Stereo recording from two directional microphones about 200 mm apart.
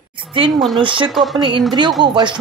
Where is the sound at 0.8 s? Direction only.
25° right (ahead or behind).